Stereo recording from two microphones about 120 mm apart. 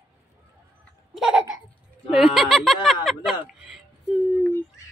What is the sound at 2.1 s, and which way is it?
Speech, centre (ahead or behind).